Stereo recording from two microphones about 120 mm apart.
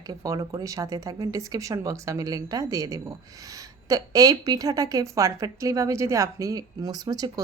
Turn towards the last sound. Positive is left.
turn(degrees=-35)  # may be behind; listen again after turning